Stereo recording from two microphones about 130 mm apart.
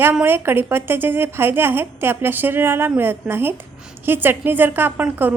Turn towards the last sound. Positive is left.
turn(degrees=-15)  # may be behind; listen again after turning